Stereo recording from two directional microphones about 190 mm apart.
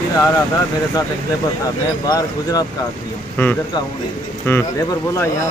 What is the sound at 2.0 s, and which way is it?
Speech, 20° left (ahead or behind).